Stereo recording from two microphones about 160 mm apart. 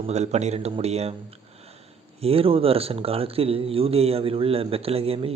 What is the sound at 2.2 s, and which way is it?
Speech, 35° right (ahead or behind).